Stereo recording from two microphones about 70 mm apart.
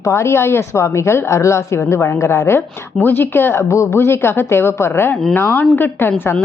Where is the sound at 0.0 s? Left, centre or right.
Left.